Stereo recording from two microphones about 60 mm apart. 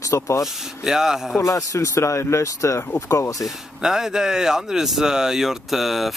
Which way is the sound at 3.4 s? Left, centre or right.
Centre.